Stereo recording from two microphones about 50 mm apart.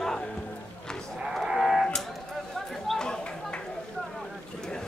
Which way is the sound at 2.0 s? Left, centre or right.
Centre.